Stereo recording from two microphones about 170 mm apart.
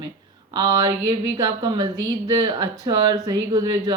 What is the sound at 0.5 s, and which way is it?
Speech, 25° right (ahead or behind).